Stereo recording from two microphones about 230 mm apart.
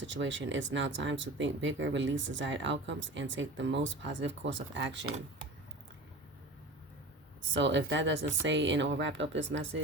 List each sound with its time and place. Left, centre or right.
0.0 s speech: right
7.5 s speech: right